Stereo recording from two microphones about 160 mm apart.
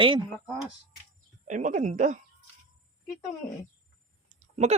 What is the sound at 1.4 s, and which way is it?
Speech, 50° right (ahead or behind).